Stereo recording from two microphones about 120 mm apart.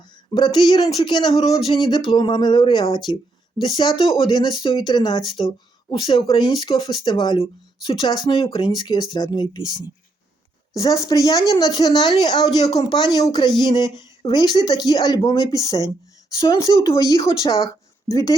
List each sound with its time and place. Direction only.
0.3 s speech: 40° left (ahead or behind); by 17.7 s 25° left (ahead or behind)